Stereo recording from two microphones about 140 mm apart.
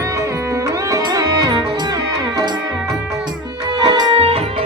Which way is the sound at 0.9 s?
25° right (ahead or behind).